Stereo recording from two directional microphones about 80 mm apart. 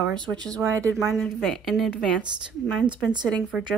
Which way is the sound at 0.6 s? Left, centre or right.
Right.